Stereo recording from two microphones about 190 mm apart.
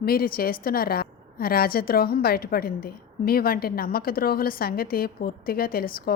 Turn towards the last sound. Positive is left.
turn(degrees=50)  # may be behind; listen again after turning